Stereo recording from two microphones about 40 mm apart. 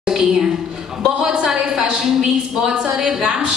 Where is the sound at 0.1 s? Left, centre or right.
Centre.